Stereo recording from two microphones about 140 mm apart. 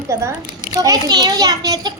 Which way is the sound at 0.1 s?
20° right (ahead or behind).